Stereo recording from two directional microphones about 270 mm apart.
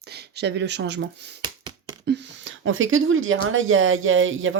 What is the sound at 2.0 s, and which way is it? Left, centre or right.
Speech, right.